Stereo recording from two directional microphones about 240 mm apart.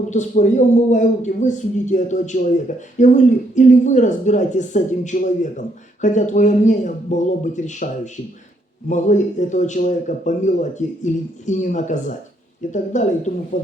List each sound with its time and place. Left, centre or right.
0.1 s speech: left